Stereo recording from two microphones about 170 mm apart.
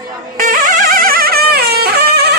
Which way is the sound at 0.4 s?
50° right (ahead or behind).